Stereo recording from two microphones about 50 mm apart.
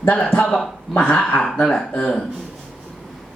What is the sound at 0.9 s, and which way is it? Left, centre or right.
Speech, left.